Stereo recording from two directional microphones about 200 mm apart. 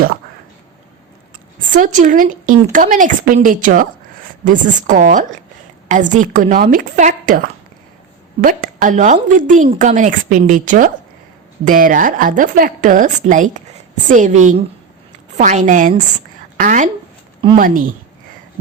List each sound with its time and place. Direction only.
1.7 s a woman's voice: 40° right (ahead or behind)